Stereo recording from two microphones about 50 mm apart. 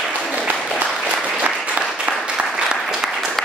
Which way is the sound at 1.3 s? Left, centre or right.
Right.